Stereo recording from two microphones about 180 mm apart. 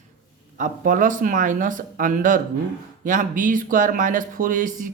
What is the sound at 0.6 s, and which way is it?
Speech, 45° right (ahead or behind).